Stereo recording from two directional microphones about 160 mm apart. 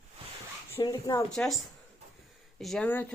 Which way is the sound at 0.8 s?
20° left (ahead or behind).